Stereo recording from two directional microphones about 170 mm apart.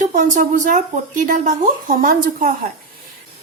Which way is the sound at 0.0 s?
50° right (ahead or behind).